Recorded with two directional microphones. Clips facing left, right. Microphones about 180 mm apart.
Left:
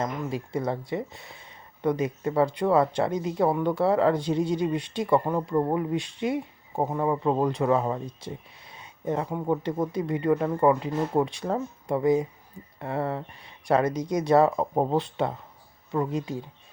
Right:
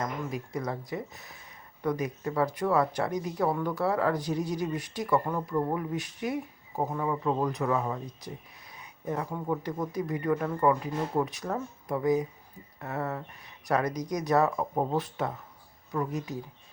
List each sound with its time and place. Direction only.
0.0 s speech: 30° left (ahead or behind)